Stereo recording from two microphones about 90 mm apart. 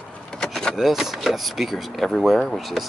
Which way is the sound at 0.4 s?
5° left (ahead or behind).